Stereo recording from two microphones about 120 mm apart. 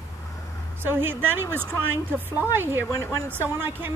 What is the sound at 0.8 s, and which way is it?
A woman's voice, 20° right (ahead or behind).